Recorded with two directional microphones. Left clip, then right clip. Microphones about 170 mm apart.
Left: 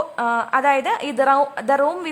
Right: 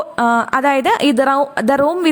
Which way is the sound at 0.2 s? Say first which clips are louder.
Right 5 dB; 35° right (ahead or behind).